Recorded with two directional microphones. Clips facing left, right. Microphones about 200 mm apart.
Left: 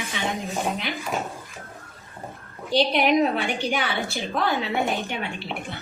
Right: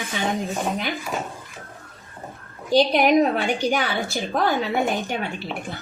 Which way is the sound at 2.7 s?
45° right (ahead or behind).